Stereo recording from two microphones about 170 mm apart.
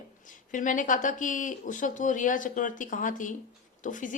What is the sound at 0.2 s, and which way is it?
A woman's voice, 50° left (ahead or behind).